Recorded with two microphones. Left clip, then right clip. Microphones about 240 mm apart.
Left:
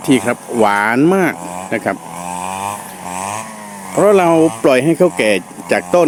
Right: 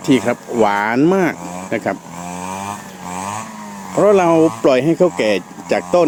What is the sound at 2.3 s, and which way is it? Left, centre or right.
Vehicle, left.